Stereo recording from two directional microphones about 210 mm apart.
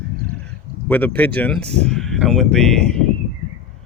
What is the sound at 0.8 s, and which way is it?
Speech, 10° left (ahead or behind).